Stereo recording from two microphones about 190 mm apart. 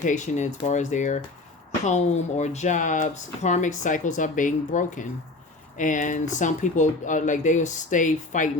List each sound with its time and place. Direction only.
0.0 s speech: 40° left (ahead or behind)